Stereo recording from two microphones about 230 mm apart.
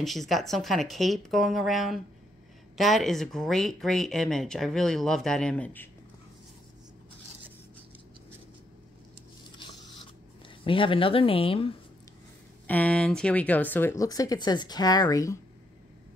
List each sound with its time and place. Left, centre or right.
0.0 s speech: centre
10.6 s speech: left
12.6 s speech: centre